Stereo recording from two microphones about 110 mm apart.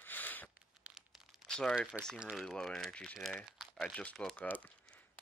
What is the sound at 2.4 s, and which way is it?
Speech, 5° left (ahead or behind).